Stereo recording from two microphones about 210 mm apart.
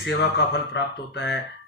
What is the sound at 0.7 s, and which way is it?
Speech, 55° left (ahead or behind).